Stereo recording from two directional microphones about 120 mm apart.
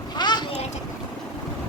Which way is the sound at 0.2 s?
40° left (ahead or behind).